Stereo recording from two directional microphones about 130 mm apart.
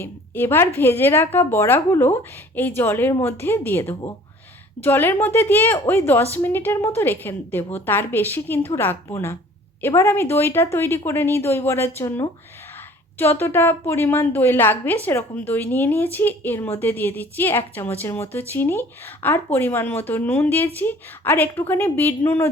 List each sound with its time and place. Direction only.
0.0 s a woman's voice: 15° left (ahead or behind)